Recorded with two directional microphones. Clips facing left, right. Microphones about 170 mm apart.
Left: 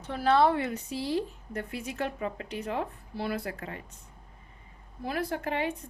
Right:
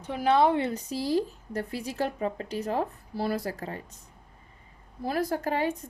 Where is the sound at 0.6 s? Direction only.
40° right (ahead or behind).